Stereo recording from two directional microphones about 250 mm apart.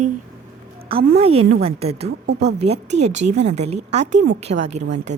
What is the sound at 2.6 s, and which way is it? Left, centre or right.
A woman's voice, right.